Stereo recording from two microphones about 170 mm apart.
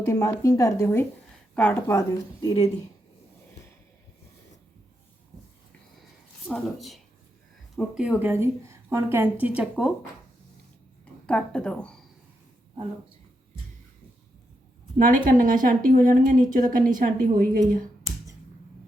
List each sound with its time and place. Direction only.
0.0 s a woman's voice: 20° left (ahead or behind)
6.5 s a woman's voice: centre (ahead or behind)
11.0 s a woman's voice: 5° left (ahead or behind)
14.9 s speech: 50° right (ahead or behind)